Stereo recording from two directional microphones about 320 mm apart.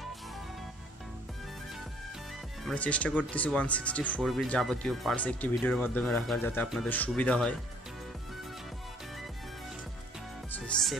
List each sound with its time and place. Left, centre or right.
2.6 s speech: centre
10.7 s speech: centre